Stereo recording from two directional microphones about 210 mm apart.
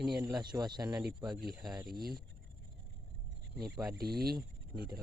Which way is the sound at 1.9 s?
45° right (ahead or behind).